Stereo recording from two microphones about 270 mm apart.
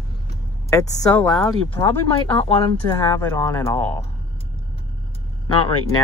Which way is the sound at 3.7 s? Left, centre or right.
Centre.